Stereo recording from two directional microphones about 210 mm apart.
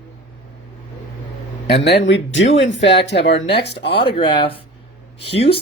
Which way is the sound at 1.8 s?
55° left (ahead or behind).